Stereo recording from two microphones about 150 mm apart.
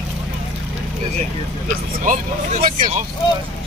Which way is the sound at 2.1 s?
60° right (ahead or behind).